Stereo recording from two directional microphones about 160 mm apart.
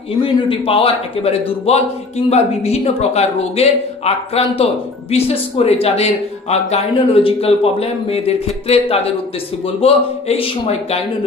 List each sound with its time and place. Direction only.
0.1 s speech: 35° left (ahead or behind)